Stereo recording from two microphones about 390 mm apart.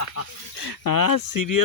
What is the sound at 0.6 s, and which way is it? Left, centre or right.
Speech, left.